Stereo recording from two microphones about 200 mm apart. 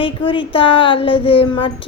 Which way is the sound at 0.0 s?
25° left (ahead or behind).